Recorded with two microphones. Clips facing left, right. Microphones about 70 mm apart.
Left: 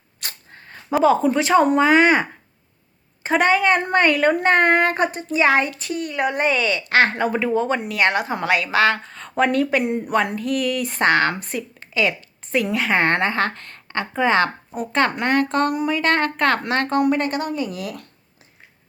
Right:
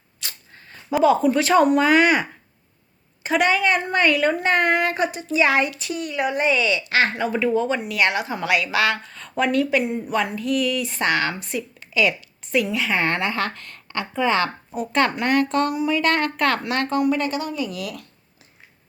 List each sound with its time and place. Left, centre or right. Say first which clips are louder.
0.2 s a sound: left 2 dB; left
1.0 s speech: even; left
3.2 s a woman's voice: left 2 dB; left
9.8 s speech: left 3 dB; left
12.6 s a woman's voice: left 3 dB; left
14.7 s speech: right 3 dB; left
15.2 s a woman's voice: left 1 dB; left
16.0 s a woman's voice: left 2 dB; left